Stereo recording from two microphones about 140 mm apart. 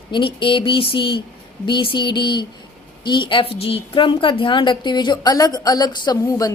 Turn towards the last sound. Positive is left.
turn(degrees=25)  # may be behind; listen again after turning